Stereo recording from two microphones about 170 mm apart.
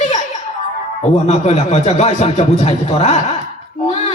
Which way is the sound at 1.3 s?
40° left (ahead or behind).